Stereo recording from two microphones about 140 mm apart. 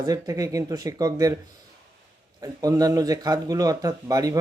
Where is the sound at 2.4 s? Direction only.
25° right (ahead or behind).